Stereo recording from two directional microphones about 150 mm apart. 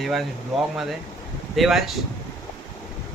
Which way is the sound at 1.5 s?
Centre (ahead or behind).